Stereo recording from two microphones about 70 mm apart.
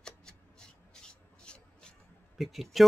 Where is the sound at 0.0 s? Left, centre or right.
Centre.